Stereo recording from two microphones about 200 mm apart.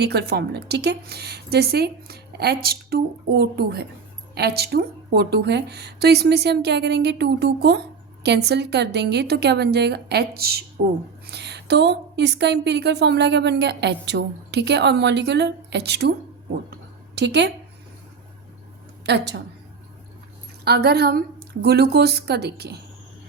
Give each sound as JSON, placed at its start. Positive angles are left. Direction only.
{"t": 0.0, "sound": "a woman's voice", "side_deg": -55}
{"t": 11.3, "sound": "a woman's voice", "side_deg": -55}
{"t": 17.2, "sound": "a woman's voice", "side_deg": -60}
{"t": 19.0, "sound": "a woman's voice", "side_deg": -60}
{"t": 20.7, "sound": "a woman's voice", "side_deg": -55}